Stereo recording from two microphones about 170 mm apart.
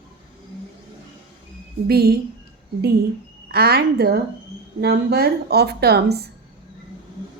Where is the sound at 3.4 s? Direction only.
65° right (ahead or behind).